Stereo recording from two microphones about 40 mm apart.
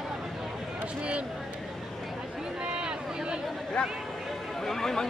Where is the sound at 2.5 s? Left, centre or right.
Right.